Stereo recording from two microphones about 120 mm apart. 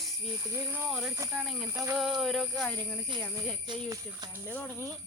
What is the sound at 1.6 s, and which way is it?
Speech, 25° right (ahead or behind).